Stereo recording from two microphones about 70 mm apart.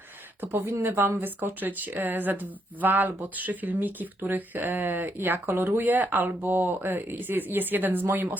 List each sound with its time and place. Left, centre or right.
0.4 s speech: right